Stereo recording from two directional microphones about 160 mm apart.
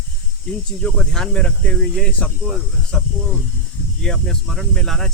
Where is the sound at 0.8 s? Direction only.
Centre (ahead or behind).